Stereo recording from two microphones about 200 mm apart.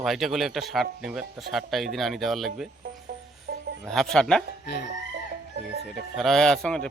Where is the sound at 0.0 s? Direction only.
Centre (ahead or behind).